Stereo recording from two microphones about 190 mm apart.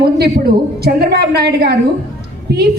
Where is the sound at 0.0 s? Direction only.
55° right (ahead or behind).